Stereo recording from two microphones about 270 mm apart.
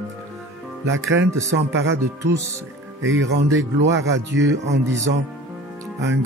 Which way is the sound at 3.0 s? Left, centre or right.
Right.